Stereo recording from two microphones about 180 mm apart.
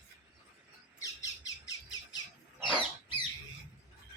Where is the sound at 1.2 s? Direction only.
20° left (ahead or behind).